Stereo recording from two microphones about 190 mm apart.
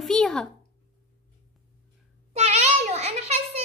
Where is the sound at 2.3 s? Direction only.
35° right (ahead or behind).